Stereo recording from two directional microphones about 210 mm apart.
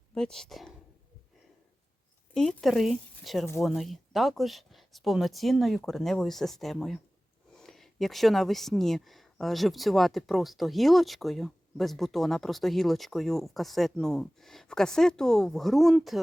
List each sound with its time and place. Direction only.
0.1 s speech: 5° left (ahead or behind)
2.3 s speech: centre (ahead or behind)